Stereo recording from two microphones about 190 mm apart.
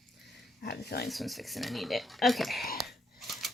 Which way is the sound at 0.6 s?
55° left (ahead or behind).